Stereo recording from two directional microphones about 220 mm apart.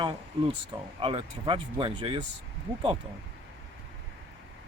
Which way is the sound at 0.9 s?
25° right (ahead or behind).